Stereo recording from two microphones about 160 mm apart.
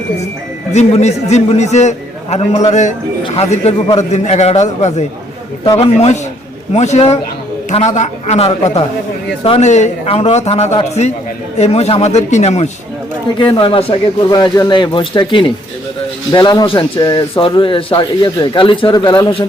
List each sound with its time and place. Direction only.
0.7 s a man's voice: 45° left (ahead or behind)
13.4 s speech: 30° left (ahead or behind)